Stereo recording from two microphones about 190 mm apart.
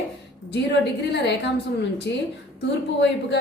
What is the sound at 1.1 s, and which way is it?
A woman's voice, 65° left (ahead or behind).